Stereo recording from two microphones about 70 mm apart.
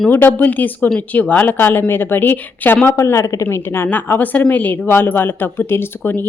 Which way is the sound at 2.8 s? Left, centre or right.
Left.